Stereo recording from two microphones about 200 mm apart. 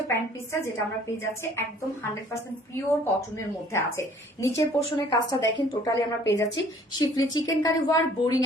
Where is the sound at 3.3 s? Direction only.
15° left (ahead or behind).